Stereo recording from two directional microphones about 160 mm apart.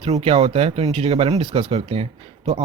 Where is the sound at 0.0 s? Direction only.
35° right (ahead or behind).